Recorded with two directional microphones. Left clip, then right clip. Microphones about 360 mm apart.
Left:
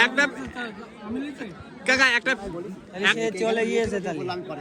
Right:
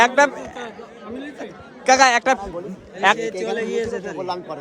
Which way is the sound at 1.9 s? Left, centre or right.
Centre.